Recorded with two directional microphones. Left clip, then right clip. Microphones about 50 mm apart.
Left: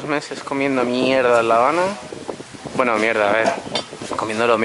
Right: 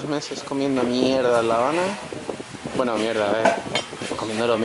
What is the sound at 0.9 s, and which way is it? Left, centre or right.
Speech, left.